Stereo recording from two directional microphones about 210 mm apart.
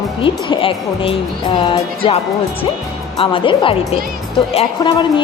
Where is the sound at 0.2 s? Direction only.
25° left (ahead or behind).